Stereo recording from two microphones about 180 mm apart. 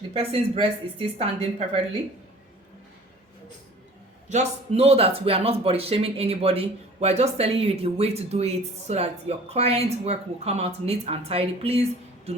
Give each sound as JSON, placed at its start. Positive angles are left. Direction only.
{"t": 0.1, "sound": "speech", "side_deg": -30}
{"t": 4.3, "sound": "speech", "side_deg": -40}